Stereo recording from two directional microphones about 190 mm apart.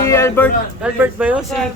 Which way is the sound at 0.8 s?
10° right (ahead or behind).